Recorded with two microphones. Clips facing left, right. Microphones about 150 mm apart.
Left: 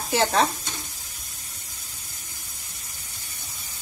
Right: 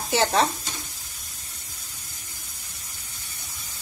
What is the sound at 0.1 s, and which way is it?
Stir, centre (ahead or behind).